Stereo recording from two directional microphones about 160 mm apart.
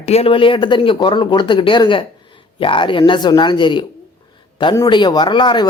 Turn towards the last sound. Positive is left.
turn(degrees=30)  # may be behind; listen again after turning